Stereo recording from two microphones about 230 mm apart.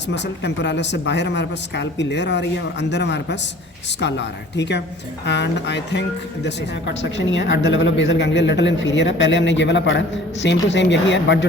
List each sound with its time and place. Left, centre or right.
0.1 s speech: left